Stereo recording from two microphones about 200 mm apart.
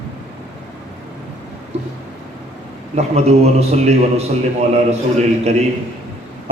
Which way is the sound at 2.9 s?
35° right (ahead or behind).